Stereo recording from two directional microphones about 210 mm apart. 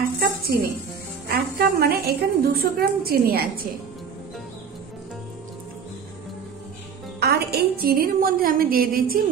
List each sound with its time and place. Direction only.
0.2 s music: 45° right (ahead or behind)
1.3 s a woman's voice: 45° right (ahead or behind)
7.2 s a woman's voice: 50° right (ahead or behind)